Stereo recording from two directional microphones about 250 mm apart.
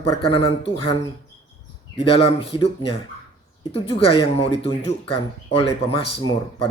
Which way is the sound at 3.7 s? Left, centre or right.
Left.